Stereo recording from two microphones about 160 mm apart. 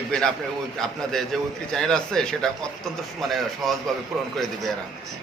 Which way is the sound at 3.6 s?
Centre (ahead or behind).